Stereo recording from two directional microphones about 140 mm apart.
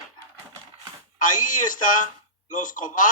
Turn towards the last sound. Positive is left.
turn(degrees=70)  # may be behind; listen again after turning